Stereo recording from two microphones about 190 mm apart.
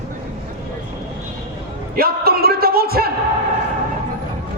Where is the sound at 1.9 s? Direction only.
55° right (ahead or behind).